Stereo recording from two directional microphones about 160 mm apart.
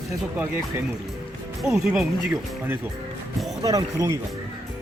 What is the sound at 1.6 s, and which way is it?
Speech, 5° right (ahead or behind).